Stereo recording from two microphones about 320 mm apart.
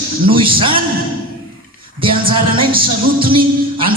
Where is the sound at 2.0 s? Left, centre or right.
Centre.